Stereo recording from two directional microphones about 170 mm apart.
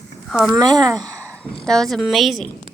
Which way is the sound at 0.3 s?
5° right (ahead or behind).